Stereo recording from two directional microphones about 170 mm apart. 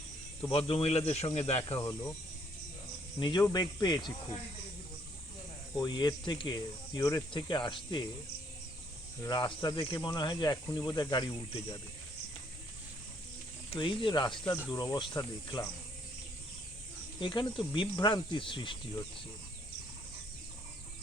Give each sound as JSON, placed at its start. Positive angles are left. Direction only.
{"t": 0.4, "sound": "speech", "side_deg": 35}
{"t": 3.2, "sound": "speech", "side_deg": 30}
{"t": 5.8, "sound": "speech", "side_deg": 25}
{"t": 9.2, "sound": "speech", "side_deg": 25}
{"t": 13.7, "sound": "speech", "side_deg": 30}
{"t": 17.2, "sound": "speech", "side_deg": 30}